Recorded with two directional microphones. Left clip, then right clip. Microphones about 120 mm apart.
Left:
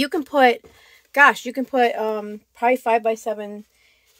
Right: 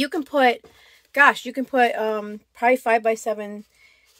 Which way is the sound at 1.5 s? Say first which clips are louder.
Even; 15° left (ahead or behind).